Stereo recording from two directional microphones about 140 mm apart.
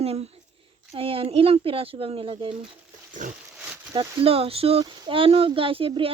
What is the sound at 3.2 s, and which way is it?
Pig, 65° right (ahead or behind).